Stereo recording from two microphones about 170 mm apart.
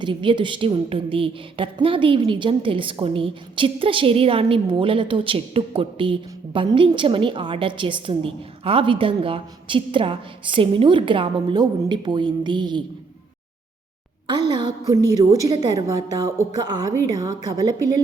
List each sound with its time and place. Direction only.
0.0 s a woman's voice: 30° right (ahead or behind)
14.3 s a woman's voice: 25° right (ahead or behind)